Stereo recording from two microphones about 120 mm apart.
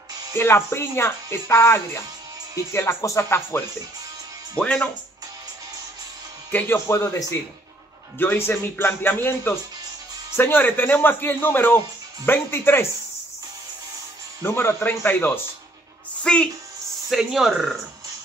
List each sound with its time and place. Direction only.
0.4 s speech: 20° left (ahead or behind)
4.6 s speech: 10° left (ahead or behind)
6.9 s speech: 25° left (ahead or behind)
14.4 s speech: 20° left (ahead or behind)
16.3 s speech: 5° left (ahead or behind)